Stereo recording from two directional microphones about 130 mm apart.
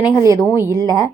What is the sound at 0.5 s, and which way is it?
Speech, 20° right (ahead or behind).